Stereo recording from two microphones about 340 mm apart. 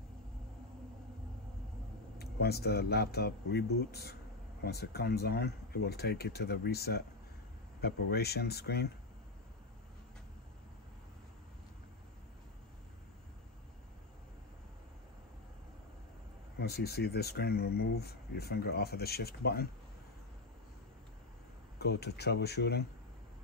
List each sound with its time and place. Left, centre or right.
2.1 s speech: left
16.5 s speech: left
21.7 s speech: left